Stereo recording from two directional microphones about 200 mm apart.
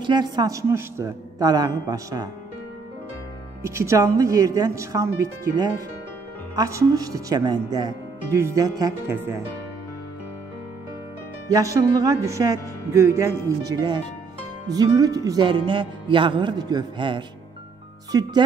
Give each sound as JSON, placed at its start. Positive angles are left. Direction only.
{"t": 0.0, "sound": "speech", "side_deg": -20}
{"t": 3.6, "sound": "speech", "side_deg": -15}
{"t": 11.4, "sound": "speech", "side_deg": -15}
{"t": 14.7, "sound": "music", "side_deg": -20}
{"t": 18.1, "sound": "speech", "side_deg": -20}